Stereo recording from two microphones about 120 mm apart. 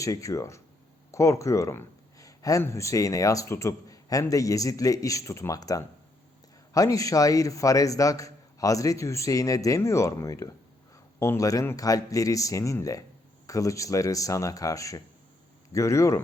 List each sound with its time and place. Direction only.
0.0 s speech: 25° left (ahead or behind)